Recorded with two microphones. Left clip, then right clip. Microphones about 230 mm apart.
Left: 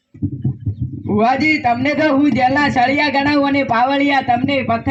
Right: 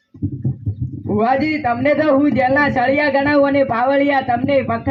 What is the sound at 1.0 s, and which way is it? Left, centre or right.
A man's voice, left.